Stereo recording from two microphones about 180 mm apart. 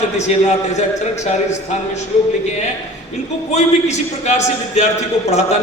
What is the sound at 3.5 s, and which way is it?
A man's voice, 40° left (ahead or behind).